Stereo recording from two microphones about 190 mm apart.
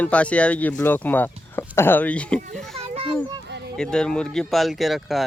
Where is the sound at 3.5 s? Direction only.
65° right (ahead or behind).